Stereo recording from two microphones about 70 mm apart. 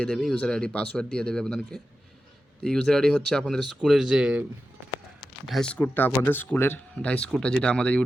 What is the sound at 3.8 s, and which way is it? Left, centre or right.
Speech, centre.